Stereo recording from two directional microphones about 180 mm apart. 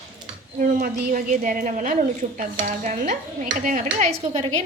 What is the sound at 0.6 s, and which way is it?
A woman's voice, 45° right (ahead or behind).